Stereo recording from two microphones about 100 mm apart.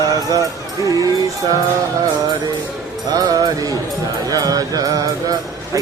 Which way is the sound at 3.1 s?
40° right (ahead or behind).